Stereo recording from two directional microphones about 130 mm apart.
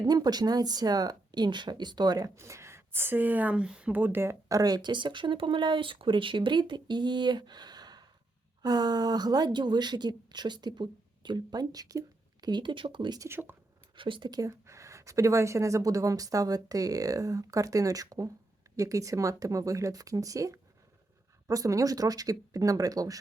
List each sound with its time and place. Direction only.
0.0 s speech: 30° right (ahead or behind)
13.2 s speech: 15° right (ahead or behind)
13.9 s speech: 40° right (ahead or behind)